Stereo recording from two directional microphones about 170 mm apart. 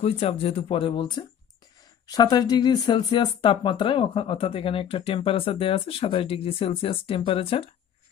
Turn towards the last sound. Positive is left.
turn(degrees=35)  # may be behind; listen again after turning